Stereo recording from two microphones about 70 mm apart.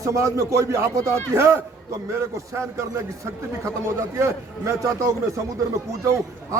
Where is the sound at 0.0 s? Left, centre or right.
Right.